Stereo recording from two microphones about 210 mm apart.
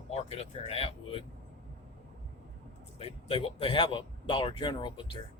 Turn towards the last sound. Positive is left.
turn(degrees=20)  # may be behind; listen again after turning